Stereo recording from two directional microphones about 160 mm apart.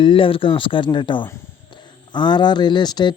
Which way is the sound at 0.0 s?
35° left (ahead or behind).